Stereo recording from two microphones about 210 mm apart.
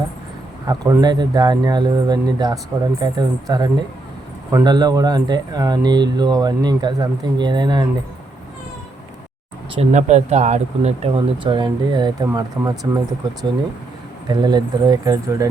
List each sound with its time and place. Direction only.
0.7 s speech: 15° right (ahead or behind)
9.7 s speech: 35° right (ahead or behind); by 13.0 s 15° right (ahead or behind)
14.3 s speech: 20° right (ahead or behind)